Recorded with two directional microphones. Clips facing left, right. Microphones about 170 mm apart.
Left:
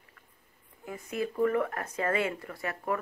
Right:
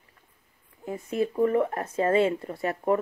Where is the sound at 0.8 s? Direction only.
25° right (ahead or behind).